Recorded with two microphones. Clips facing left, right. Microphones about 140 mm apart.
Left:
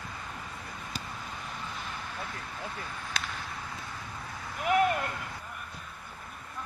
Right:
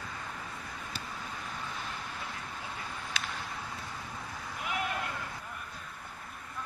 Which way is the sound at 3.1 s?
40° left (ahead or behind).